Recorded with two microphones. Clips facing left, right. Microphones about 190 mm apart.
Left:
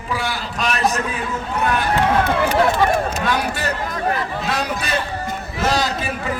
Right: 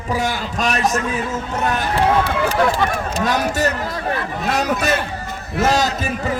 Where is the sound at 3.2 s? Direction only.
40° right (ahead or behind).